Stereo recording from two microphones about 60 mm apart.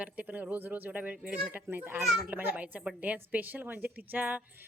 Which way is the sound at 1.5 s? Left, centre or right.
Right.